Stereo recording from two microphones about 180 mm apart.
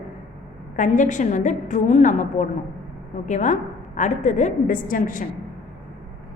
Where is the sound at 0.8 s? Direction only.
45° left (ahead or behind).